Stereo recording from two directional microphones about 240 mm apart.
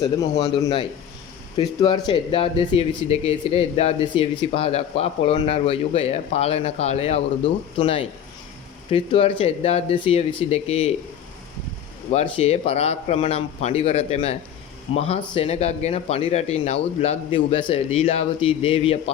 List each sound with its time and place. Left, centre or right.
0.0 s a man's voice: centre
12.1 s speech: left